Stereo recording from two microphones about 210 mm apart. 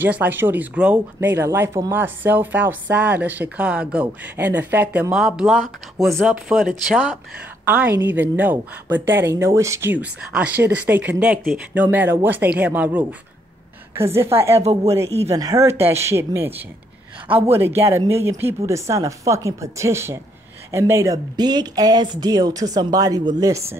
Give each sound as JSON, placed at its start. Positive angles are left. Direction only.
{"t": 0.0, "sound": "speech", "side_deg": -10}